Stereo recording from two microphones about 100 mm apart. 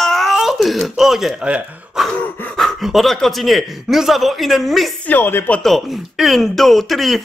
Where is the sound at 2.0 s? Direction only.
5° right (ahead or behind).